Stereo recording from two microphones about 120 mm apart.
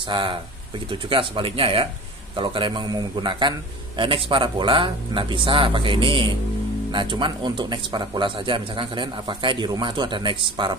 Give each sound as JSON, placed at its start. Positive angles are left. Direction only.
{"t": 0.1, "sound": "a man's voice", "side_deg": -45}